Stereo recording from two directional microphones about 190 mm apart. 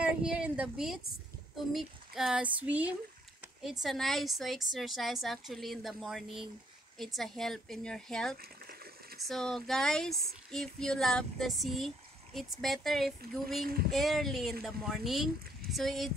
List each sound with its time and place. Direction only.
0.0 s a woman's voice: 5° right (ahead or behind)
8.4 s boiling: 55° right (ahead or behind)
9.3 s a woman's voice: 5° left (ahead or behind)